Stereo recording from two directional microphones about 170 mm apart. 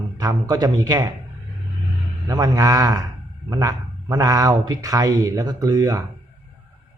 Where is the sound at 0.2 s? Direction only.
20° right (ahead or behind).